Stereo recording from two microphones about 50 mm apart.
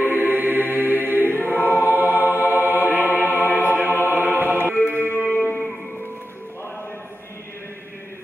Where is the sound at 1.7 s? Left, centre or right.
Right.